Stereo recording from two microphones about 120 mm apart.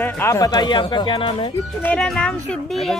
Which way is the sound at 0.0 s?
20° left (ahead or behind).